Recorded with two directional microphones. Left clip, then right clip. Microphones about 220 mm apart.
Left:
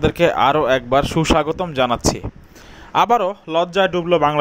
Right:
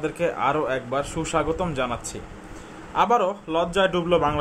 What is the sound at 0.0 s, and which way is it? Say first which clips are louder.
A man's voice: left 9 dB; 35° left (ahead or behind).